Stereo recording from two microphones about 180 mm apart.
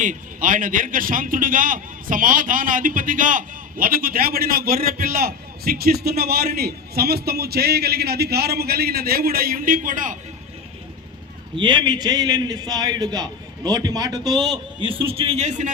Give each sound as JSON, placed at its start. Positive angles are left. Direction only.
{"t": 0.0, "sound": "a man's voice", "side_deg": -50}
{"t": 11.5, "sound": "a man's voice", "side_deg": -25}